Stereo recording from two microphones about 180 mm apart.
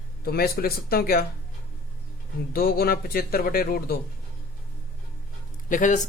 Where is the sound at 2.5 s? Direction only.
55° left (ahead or behind).